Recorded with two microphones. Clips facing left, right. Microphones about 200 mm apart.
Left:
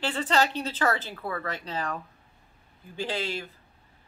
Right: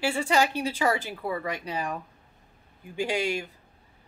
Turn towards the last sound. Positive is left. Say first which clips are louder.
# right 4 dB
turn(degrees=-15)  # may be behind; listen again after turning